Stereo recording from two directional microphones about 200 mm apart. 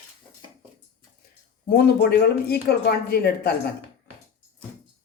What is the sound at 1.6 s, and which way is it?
Speech, 50° left (ahead or behind).